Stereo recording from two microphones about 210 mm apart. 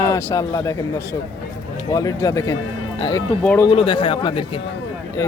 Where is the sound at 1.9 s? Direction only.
15° left (ahead or behind).